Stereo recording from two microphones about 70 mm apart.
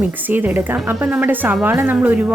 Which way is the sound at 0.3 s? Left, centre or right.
Right.